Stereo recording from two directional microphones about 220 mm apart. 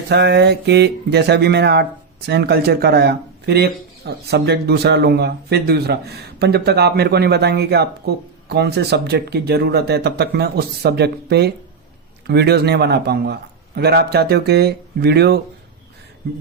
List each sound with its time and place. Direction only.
0.1 s speech: 50° right (ahead or behind)